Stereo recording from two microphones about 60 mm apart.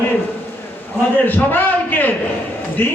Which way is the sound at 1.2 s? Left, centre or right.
Left.